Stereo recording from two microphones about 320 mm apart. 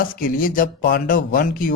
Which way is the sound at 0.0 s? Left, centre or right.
Left.